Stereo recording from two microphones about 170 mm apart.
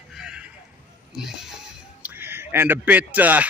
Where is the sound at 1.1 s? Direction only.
5° right (ahead or behind).